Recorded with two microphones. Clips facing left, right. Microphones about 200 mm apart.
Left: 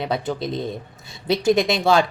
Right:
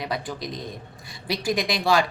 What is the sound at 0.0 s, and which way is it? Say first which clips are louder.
A woman's voice: left 6 dB; 25° left (ahead or behind).